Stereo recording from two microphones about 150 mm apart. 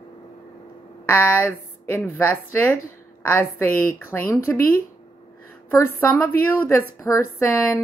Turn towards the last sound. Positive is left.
turn(degrees=15)  # may be behind; listen again after turning